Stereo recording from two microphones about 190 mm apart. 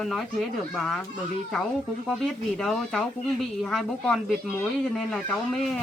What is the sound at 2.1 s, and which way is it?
Speech, 5° left (ahead or behind).